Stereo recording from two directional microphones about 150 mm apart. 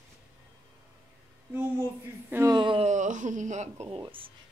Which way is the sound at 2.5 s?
35° right (ahead or behind).